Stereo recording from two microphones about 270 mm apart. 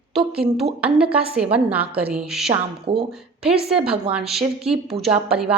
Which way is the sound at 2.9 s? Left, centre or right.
Centre.